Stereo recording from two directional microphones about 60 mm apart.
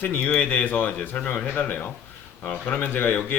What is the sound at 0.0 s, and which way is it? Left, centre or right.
Speech, left.